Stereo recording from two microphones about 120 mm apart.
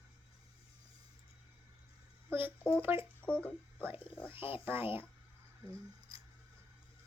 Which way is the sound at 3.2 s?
10° left (ahead or behind).